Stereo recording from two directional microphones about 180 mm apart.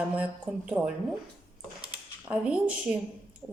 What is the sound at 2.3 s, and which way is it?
Speech, 5° right (ahead or behind).